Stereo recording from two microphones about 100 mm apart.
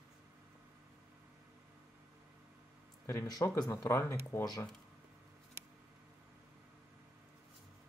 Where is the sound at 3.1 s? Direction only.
35° left (ahead or behind).